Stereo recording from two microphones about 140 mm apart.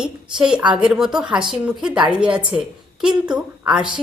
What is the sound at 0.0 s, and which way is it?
A woman's voice, 5° right (ahead or behind).